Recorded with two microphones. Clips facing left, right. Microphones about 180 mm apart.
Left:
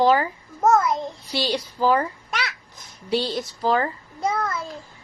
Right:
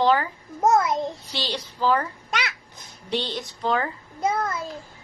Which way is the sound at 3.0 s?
5° left (ahead or behind).